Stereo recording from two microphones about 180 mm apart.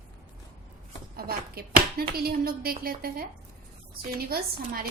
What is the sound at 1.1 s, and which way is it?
A woman's voice, 60° right (ahead or behind).